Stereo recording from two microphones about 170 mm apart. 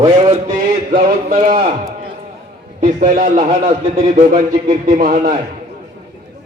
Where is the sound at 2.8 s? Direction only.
45° right (ahead or behind).